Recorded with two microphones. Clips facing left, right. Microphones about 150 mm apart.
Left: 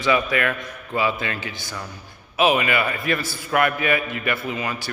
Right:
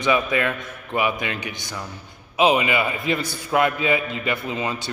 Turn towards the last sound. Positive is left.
turn(degrees=-25)  # may be behind; listen again after turning